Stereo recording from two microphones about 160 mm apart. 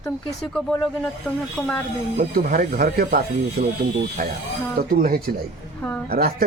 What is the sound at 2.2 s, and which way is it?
Speech, 70° right (ahead or behind).